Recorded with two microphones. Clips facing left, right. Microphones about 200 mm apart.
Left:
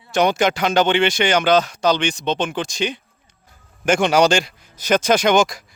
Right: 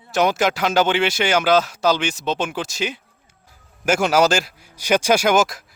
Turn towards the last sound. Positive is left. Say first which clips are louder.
# left 1 dB
turn(degrees=0)  # may be behind; listen again after turning